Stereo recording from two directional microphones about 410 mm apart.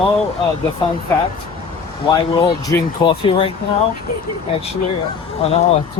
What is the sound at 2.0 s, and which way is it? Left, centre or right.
Speech, centre.